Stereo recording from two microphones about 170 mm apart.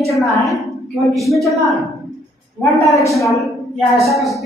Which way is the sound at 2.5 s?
15° left (ahead or behind).